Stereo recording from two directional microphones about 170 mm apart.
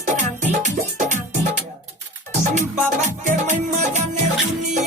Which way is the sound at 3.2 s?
45° right (ahead or behind).